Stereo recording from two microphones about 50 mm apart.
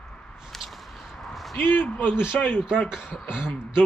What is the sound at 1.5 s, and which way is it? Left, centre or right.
Speech, left.